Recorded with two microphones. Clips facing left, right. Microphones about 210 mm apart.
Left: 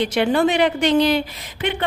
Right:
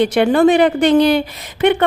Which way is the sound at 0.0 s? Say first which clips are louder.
Right 6 dB; 50° right (ahead or behind).